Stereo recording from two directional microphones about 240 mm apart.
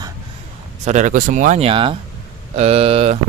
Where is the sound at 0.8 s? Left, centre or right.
Right.